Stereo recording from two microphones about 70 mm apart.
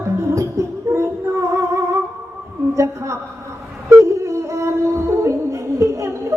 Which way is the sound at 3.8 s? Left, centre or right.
Right.